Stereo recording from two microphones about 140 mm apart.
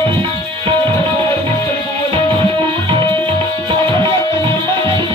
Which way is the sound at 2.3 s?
40° right (ahead or behind).